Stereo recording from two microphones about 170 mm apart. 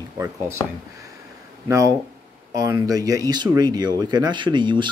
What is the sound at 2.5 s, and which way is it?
Speech, 20° right (ahead or behind).